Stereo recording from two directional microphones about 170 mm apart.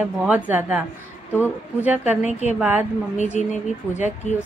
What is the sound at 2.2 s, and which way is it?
Speech, 40° left (ahead or behind).